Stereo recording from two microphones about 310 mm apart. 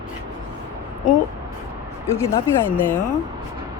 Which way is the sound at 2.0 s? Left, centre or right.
Centre.